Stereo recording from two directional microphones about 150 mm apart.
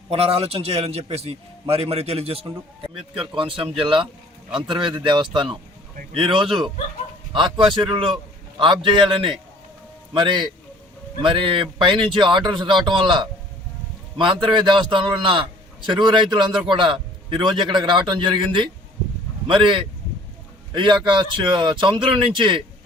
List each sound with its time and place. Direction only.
0.1 s a man's voice: 40° right (ahead or behind)
14.4 s a man's voice: 30° right (ahead or behind)